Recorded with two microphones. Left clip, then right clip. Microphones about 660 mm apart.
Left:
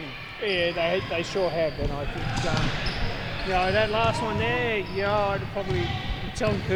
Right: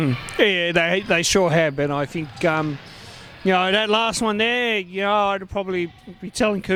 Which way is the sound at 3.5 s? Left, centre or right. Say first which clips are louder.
Right 3 dB; right.